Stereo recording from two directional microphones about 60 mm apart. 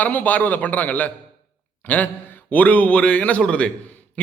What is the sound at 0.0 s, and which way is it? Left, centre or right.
A man's voice, left.